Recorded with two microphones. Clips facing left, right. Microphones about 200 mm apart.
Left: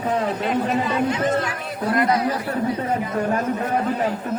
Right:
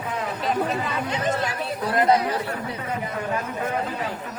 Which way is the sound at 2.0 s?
30° right (ahead or behind).